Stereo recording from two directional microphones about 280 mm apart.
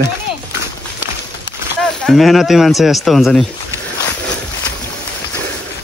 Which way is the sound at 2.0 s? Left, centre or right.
Centre.